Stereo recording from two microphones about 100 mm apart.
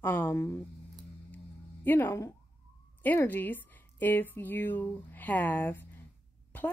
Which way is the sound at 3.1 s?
20° left (ahead or behind).